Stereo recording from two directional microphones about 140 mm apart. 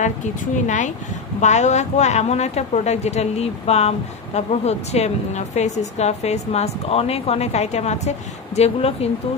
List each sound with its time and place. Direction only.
0.7 s a woman's voice: 60° left (ahead or behind)